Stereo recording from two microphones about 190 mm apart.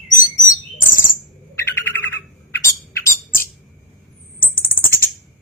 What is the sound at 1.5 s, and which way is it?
Bird, 10° left (ahead or behind).